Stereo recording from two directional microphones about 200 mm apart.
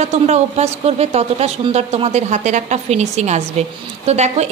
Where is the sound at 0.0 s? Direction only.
35° right (ahead or behind).